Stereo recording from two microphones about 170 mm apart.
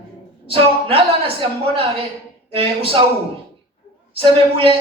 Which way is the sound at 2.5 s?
35° right (ahead or behind).